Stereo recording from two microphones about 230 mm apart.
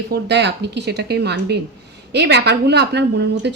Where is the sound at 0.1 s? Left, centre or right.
Right.